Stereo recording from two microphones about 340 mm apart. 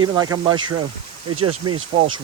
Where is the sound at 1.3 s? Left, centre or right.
Right.